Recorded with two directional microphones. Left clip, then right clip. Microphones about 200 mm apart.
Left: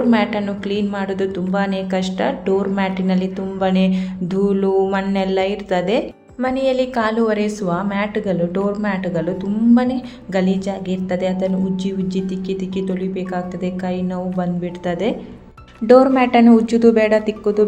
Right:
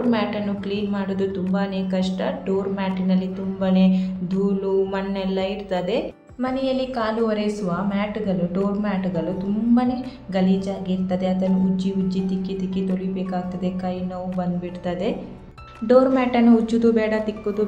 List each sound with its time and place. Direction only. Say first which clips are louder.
0.1 s a woman's voice: left 5 dB; 35° left (ahead or behind)
15.9 s a woman's voice: left 5 dB; 35° left (ahead or behind)